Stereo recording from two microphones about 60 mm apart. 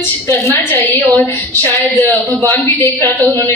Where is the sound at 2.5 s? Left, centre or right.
Left.